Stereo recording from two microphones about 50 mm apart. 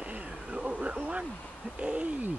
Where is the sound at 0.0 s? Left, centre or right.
Right.